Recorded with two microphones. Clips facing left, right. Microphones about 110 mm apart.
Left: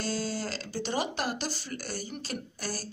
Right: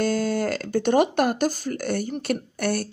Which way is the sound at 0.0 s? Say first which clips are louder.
Right 10 dB; 55° right (ahead or behind).